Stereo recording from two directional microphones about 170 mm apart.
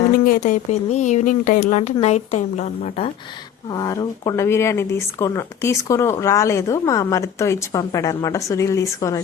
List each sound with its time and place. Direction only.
0.3 s speech: 50° left (ahead or behind)
3.7 s speech: 25° left (ahead or behind)